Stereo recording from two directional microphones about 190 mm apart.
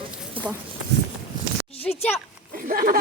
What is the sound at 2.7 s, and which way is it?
Speech, 50° right (ahead or behind).